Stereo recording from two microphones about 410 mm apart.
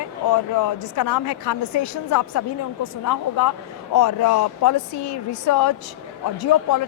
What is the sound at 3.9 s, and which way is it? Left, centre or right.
A woman's voice, left.